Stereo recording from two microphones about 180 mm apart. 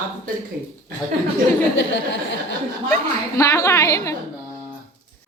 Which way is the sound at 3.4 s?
15° left (ahead or behind).